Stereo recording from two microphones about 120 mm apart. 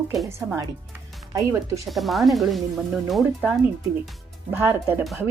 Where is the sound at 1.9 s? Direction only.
Centre (ahead or behind).